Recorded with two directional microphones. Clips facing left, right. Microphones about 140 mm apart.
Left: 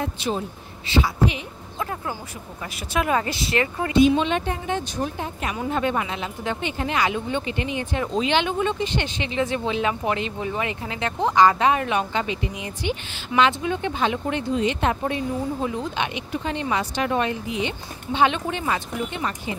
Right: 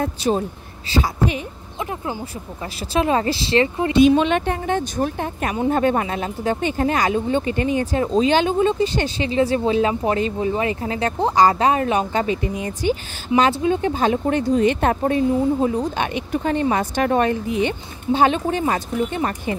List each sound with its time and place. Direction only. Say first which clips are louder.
0.0 s speech: right 6 dB; 40° right (ahead or behind)
1.8 s speech: right 2 dB; 20° right (ahead or behind)
2.9 s speech: right 4 dB; 30° right (ahead or behind)
4.2 s speech: right 4 dB; 60° right (ahead or behind)
13.4 s speech: right 3 dB; 30° right (ahead or behind)